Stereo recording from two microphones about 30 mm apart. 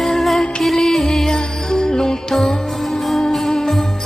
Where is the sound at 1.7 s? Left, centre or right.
Left.